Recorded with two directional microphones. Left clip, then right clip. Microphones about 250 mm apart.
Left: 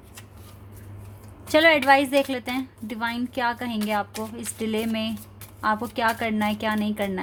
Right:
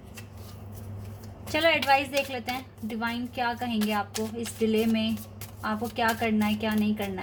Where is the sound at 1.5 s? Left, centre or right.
Left.